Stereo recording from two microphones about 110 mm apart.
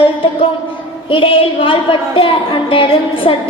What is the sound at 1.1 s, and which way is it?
A woman's voice, 55° left (ahead or behind).